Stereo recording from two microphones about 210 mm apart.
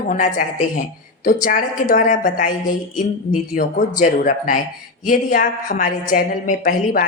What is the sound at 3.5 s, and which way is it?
A woman's voice, 40° left (ahead or behind).